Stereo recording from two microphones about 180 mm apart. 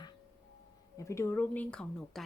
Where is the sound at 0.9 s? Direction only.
15° left (ahead or behind).